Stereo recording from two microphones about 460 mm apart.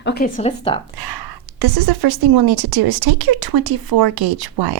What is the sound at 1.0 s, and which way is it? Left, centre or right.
A woman's voice, right.